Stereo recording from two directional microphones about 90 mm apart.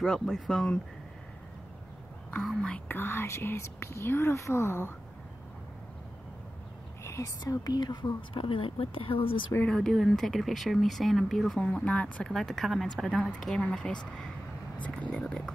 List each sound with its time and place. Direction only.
0.0 s speech: 5° left (ahead or behind)
2.4 s speech: 10° left (ahead or behind)
2.9 s speech: 25° left (ahead or behind)
7.1 s a woman's voice: 35° left (ahead or behind); by 9.5 s 75° left (ahead or behind)
9.7 s speech: 5° left (ahead or behind)
11.6 s speech: 15° left (ahead or behind)
12.3 s speech: 5° left (ahead or behind)
15.1 s speech: 10° left (ahead or behind)